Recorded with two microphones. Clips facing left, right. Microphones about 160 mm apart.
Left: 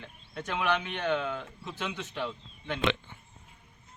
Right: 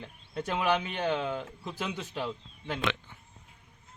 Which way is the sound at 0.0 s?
35° right (ahead or behind).